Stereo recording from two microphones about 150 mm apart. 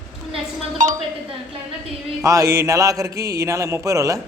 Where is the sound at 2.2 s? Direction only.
20° right (ahead or behind).